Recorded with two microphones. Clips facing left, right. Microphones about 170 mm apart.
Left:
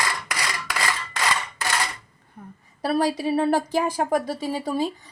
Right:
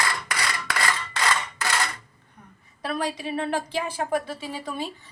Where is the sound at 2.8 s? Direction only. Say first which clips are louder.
Left 6 dB; 40° left (ahead or behind).